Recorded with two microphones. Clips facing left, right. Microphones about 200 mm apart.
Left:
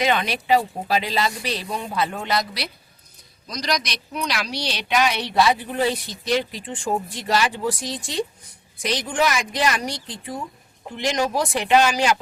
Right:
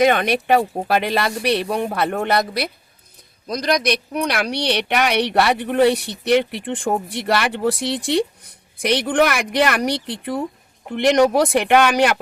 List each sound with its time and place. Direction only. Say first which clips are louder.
0.0 s speech: right 6 dB; 55° right (ahead or behind)